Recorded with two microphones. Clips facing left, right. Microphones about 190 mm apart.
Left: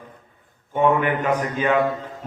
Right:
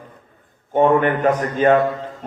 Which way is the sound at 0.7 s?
45° right (ahead or behind).